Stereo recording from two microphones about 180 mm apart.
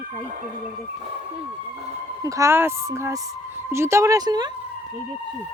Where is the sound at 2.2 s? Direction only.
15° right (ahead or behind).